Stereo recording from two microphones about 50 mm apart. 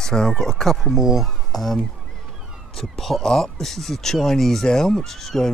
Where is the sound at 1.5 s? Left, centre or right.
Centre.